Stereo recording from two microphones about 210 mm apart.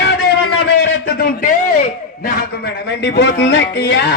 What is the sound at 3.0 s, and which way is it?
Speech, 55° left (ahead or behind).